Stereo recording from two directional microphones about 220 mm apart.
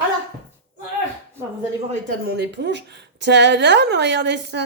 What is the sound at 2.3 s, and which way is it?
A woman's voice, 50° right (ahead or behind).